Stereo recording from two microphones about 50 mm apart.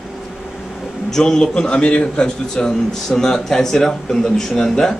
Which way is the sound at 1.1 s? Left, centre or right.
Centre.